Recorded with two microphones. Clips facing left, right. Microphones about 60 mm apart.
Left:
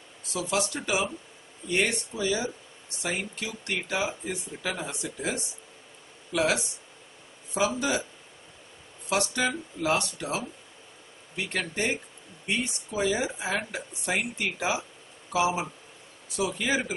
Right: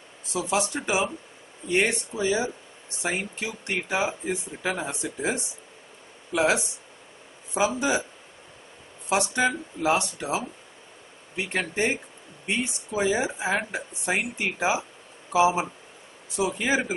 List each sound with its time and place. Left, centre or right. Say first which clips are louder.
0.3 s speech: right 3 dB; right
9.1 s speech: right 3 dB; right